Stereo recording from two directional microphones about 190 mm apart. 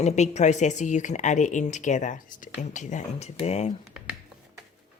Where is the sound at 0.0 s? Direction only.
35° left (ahead or behind).